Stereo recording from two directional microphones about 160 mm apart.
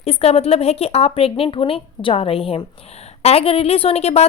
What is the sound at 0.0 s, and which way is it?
A woman's voice, 40° left (ahead or behind).